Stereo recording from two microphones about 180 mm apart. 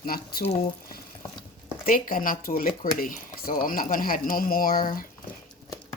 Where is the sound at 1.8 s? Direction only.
50° left (ahead or behind).